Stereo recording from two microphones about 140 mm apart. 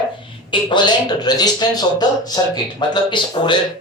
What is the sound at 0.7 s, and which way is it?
Speech, 30° left (ahead or behind).